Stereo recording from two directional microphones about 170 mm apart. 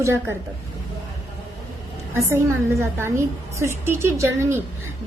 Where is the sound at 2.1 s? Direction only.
15° right (ahead or behind).